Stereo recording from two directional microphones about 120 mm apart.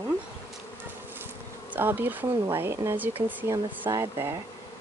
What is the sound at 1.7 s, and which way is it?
Speech, 15° right (ahead or behind).